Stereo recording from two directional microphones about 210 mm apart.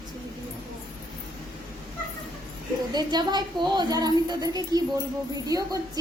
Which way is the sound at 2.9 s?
20° right (ahead or behind).